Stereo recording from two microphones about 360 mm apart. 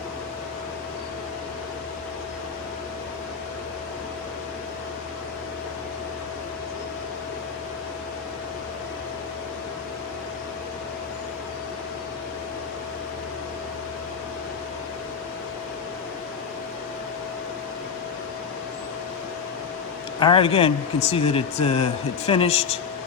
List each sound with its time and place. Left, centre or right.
20.1 s speech: centre